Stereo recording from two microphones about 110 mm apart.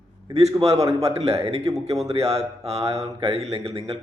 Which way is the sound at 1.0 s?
65° right (ahead or behind).